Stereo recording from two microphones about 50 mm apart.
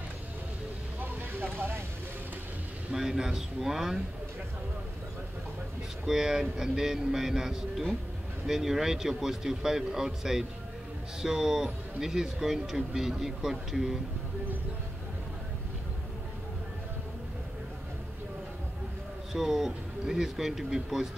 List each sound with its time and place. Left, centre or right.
1.3 s a sound: right
2.9 s speech: centre
6.0 s speech: centre
19.3 s speech: centre